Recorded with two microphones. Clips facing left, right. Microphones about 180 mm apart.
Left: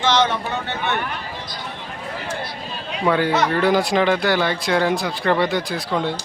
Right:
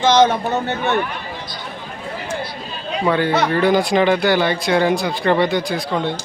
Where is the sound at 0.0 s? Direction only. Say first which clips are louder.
Right 5 dB; 45° right (ahead or behind).